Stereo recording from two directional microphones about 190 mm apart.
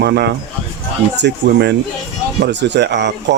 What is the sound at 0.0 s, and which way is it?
Speech, 60° right (ahead or behind).